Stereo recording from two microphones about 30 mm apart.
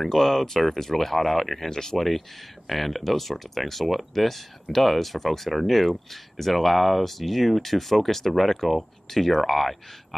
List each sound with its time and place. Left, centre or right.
0.0 s speech: centre
2.7 s speech: centre